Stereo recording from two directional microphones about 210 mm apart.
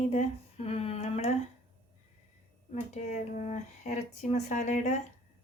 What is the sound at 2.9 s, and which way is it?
Speech, 35° left (ahead or behind).